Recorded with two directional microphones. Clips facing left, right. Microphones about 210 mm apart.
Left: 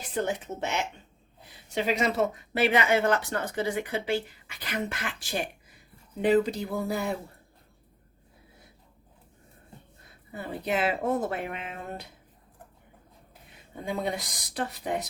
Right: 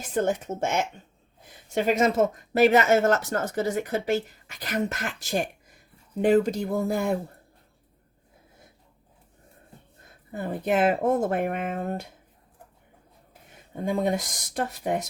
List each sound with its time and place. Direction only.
0.1 s speech: 45° right (ahead or behind)
10.3 s speech: 45° right (ahead or behind)
13.7 s speech: 45° right (ahead or behind)